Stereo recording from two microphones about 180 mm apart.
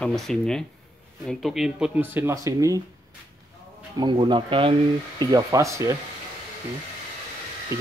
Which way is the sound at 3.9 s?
25° right (ahead or behind).